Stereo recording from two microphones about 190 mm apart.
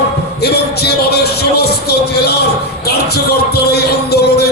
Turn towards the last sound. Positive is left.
turn(degrees=55)  # may be behind; listen again after turning